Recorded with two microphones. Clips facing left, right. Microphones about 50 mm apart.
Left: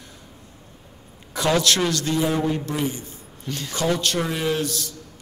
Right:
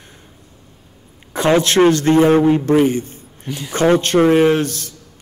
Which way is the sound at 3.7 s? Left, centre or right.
Right.